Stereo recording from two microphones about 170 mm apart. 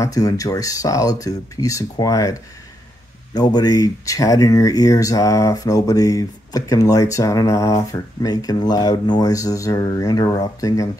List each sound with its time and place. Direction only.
0.0 s speech: 20° left (ahead or behind)
3.3 s speech: 25° left (ahead or behind)